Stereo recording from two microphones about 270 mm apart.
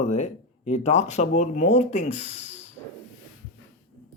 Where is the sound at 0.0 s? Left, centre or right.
Left.